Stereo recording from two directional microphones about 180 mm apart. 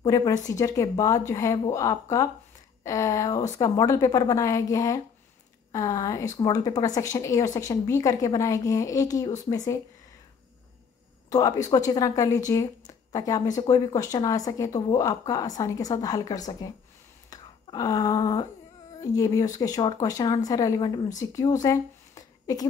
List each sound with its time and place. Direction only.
0.0 s a woman's voice: 20° left (ahead or behind)
11.2 s a woman's voice: 20° left (ahead or behind)